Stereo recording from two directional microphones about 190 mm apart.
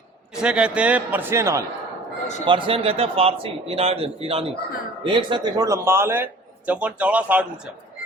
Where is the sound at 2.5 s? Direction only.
25° right (ahead or behind); by 7.7 s 5° right (ahead or behind).